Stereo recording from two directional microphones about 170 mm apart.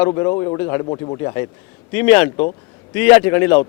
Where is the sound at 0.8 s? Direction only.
30° left (ahead or behind).